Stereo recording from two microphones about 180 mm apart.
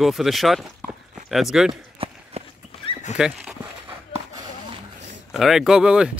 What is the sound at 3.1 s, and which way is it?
Dog, 5° right (ahead or behind).